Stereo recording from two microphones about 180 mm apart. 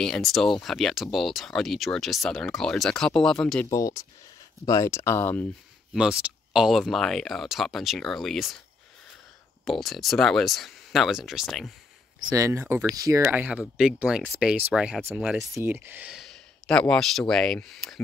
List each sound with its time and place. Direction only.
0.0 s speech: centre (ahead or behind)
3.7 s speech: 20° left (ahead or behind)
5.9 s speech: 5° right (ahead or behind)
9.7 s speech: centre (ahead or behind)
12.2 s speech: 20° right (ahead or behind); by 15.4 s centre (ahead or behind)
15.5 s speech: 15° right (ahead or behind)